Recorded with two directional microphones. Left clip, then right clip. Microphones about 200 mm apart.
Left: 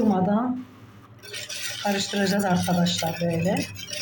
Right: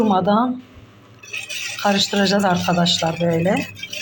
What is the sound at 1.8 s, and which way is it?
Speech, 10° right (ahead or behind).